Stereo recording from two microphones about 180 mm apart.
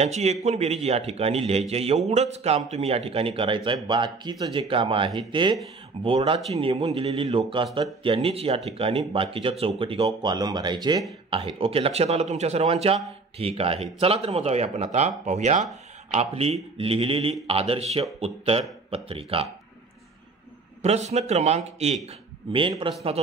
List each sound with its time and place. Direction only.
0.0 s speech: 35° right (ahead or behind)
20.8 s speech: 35° right (ahead or behind)